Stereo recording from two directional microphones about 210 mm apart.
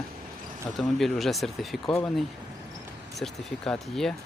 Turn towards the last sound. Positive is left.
turn(degrees=0)  # may be behind; listen again after turning